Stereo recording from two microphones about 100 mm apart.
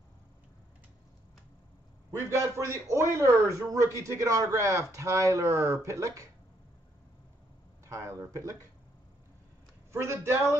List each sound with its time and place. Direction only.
2.0 s a man's voice: 30° right (ahead or behind)
7.8 s speech: 35° right (ahead or behind)
9.9 s a man's voice: 25° right (ahead or behind)